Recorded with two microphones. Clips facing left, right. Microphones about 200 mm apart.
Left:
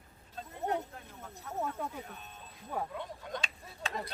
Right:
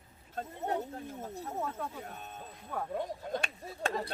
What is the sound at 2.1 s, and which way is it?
Speech, 50° right (ahead or behind).